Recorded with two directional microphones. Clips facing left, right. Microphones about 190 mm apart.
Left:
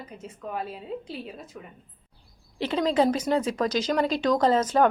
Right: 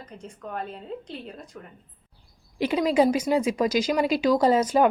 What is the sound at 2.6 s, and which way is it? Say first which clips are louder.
Speech: right 2 dB; 10° right (ahead or behind).